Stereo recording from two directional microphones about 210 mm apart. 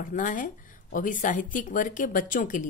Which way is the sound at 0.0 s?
40° left (ahead or behind).